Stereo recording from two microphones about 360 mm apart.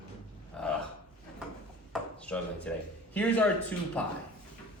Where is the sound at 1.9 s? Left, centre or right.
Centre.